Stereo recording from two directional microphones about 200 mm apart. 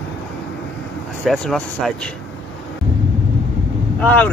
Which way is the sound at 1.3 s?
5° left (ahead or behind).